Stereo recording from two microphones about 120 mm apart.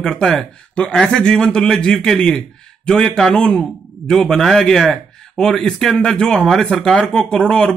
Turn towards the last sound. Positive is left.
turn(degrees=5)  # may be behind; listen again after turning